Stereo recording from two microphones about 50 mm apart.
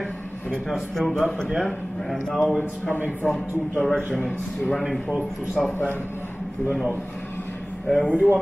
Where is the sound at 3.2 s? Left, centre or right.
Left.